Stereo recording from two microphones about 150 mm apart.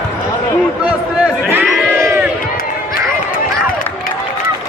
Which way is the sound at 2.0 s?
20° right (ahead or behind).